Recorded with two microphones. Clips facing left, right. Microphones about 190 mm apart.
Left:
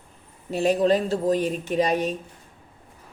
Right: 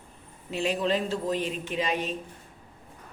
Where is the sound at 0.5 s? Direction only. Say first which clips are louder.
Left 7 dB; 40° left (ahead or behind).